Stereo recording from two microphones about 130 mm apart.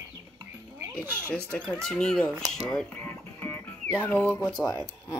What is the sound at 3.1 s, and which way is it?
Music, 15° left (ahead or behind).